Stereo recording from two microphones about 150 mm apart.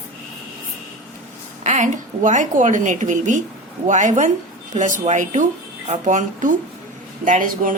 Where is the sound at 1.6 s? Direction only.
55° right (ahead or behind).